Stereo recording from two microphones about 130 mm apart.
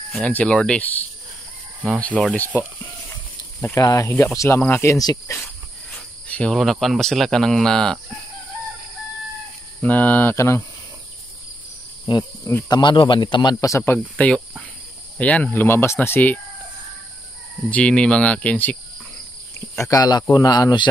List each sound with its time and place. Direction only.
0.1 s speech: 10° left (ahead or behind)
3.7 s speech: 25° left (ahead or behind)
5.4 s speech: 5° left (ahead or behind)
9.8 s speech: 15° left (ahead or behind)
12.1 s speech: 35° left (ahead or behind)
13.9 s speech: 10° left (ahead or behind)
17.6 s speech: 10° left (ahead or behind)
19.8 s speech: 25° left (ahead or behind)